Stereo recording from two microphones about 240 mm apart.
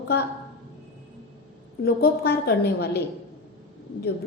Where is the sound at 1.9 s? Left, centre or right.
Left.